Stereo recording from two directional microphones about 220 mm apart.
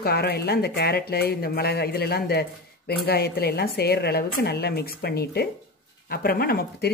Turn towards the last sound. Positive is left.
turn(degrees=45)  # may be behind; listen again after turning